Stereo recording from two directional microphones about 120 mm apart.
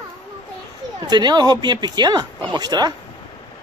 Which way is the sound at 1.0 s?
35° right (ahead or behind).